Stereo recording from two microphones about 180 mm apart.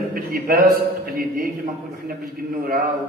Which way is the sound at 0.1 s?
55° right (ahead or behind).